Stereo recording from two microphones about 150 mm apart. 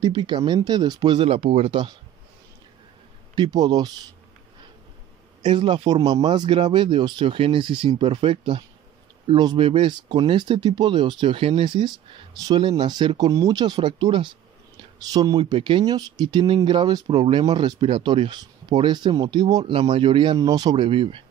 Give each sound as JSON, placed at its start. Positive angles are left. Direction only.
{"t": 0.0, "sound": "speech", "side_deg": -30}
{"t": 3.3, "sound": "speech", "side_deg": -25}
{"t": 5.5, "sound": "speech", "side_deg": -30}